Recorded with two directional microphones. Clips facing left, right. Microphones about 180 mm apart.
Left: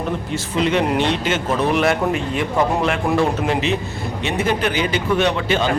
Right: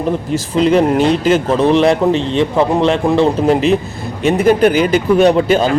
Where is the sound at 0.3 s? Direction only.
35° right (ahead or behind).